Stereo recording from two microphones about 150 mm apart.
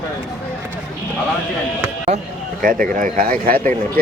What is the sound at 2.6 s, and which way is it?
Speech, 70° right (ahead or behind).